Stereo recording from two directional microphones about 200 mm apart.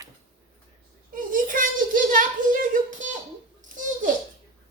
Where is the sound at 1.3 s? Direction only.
40° right (ahead or behind).